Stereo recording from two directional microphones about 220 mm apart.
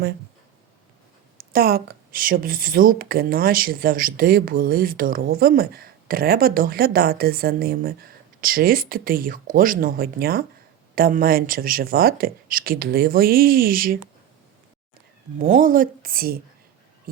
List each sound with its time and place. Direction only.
1.4 s a woman's voice: 45° right (ahead or behind)
15.4 s a woman's voice: 35° right (ahead or behind)